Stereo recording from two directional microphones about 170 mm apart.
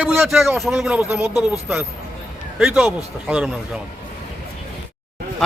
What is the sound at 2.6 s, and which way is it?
Speech, centre (ahead or behind).